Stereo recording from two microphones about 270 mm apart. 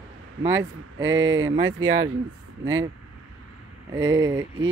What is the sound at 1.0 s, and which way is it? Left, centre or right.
Speech, right.